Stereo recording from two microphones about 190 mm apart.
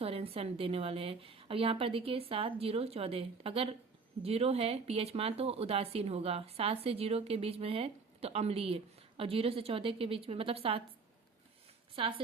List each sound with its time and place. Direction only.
0.0 s a woman's voice: 30° right (ahead or behind)
11.9 s a woman's voice: 25° right (ahead or behind)